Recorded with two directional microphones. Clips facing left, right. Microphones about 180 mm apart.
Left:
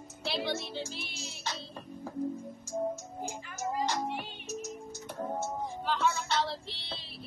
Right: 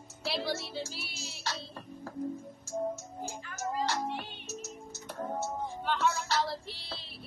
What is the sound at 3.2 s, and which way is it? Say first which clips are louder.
Music: left 1 dB; 15° left (ahead or behind).